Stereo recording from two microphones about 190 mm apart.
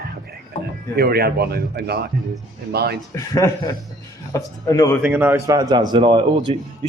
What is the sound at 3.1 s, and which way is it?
Speech, 15° left (ahead or behind).